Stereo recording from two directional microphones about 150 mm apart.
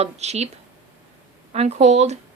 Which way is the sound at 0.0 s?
45° right (ahead or behind).